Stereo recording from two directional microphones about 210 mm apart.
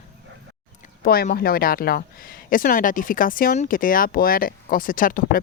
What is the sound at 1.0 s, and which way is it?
Speech, 45° left (ahead or behind).